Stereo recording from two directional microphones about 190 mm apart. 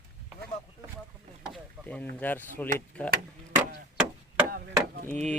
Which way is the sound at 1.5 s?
Centre (ahead or behind).